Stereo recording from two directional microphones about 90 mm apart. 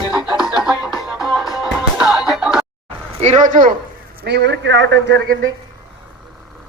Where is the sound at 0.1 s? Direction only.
5° right (ahead or behind).